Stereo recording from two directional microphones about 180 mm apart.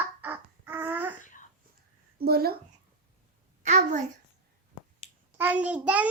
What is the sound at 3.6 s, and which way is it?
Speech, 40° right (ahead or behind).